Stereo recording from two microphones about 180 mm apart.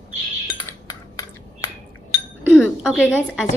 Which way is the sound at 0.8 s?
20° left (ahead or behind).